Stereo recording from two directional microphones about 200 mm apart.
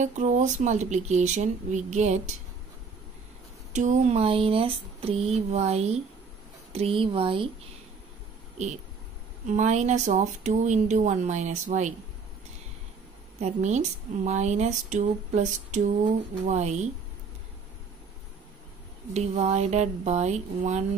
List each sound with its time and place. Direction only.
0.0 s speech: 35° right (ahead or behind)
3.7 s speech: 35° right (ahead or behind)
9.5 s speech: 35° right (ahead or behind)
13.4 s speech: 35° right (ahead or behind)
19.1 s speech: 35° right (ahead or behind)